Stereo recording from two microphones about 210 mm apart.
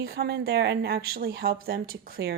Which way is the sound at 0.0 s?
50° right (ahead or behind).